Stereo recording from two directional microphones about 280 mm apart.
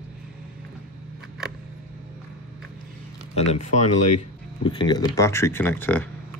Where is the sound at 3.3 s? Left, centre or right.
Left; by 6.0 s centre.